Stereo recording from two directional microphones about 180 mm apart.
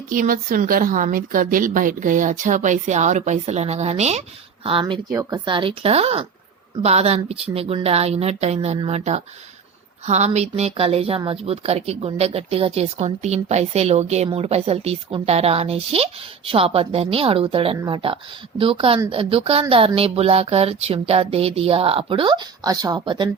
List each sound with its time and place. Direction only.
0.1 s a woman's voice: 50° right (ahead or behind); by 23.3 s 25° right (ahead or behind)